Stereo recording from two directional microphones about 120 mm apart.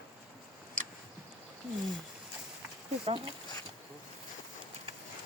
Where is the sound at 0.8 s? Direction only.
90° right.